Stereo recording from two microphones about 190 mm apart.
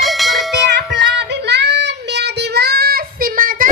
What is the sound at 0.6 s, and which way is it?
Child singing, 65° right (ahead or behind).